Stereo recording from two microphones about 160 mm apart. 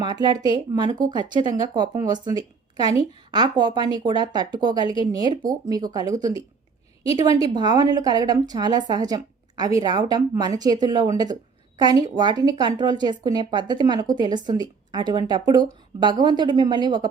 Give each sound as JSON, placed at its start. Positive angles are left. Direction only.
{"t": 0.0, "sound": "a woman's voice", "side_deg": -30}